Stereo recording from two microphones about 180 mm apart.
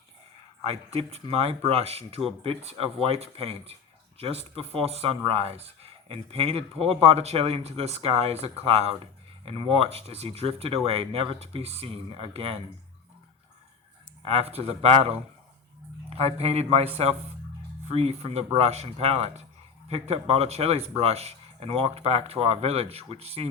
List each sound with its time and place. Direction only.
0.9 s speech: 35° right (ahead or behind)
14.3 s speech: 35° right (ahead or behind)